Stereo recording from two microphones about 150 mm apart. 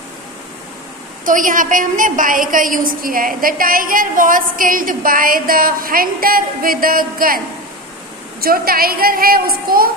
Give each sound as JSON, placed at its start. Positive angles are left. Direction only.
{"t": 1.2, "sound": "a woman's voice", "side_deg": -60}